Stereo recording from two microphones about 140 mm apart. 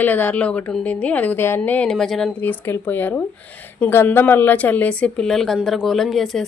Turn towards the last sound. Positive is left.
turn(degrees=0)  # may be behind; listen again after turning